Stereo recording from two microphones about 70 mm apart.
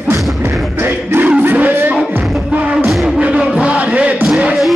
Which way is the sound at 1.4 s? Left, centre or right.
Right.